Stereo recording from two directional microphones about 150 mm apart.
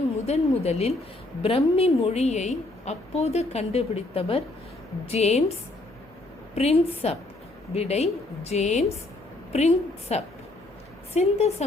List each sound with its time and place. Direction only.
0.3 s a woman's voice: 45° left (ahead or behind)
6.6 s a woman's voice: 45° left (ahead or behind)